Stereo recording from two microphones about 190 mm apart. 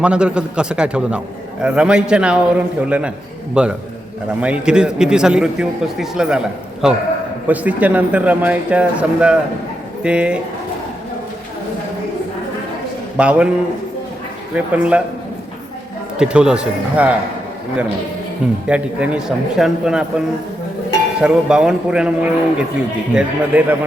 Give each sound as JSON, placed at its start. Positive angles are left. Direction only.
{"t": 0.0, "sound": "a man's voice", "side_deg": -5}
{"t": 13.1, "sound": "a man's voice", "side_deg": -5}
{"t": 14.5, "sound": "speech", "side_deg": -5}
{"t": 16.1, "sound": "a man's voice", "side_deg": -5}
{"t": 18.7, "sound": "a man's voice", "side_deg": -5}